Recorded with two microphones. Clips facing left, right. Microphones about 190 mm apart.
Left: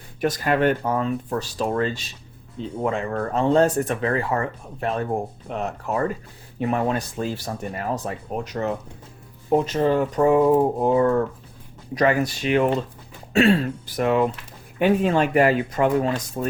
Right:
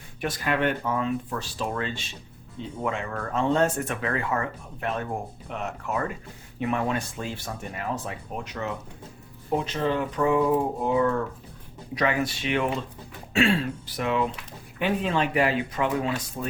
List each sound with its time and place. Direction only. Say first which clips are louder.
0.2 s speech: left 5 dB; 40° left (ahead or behind)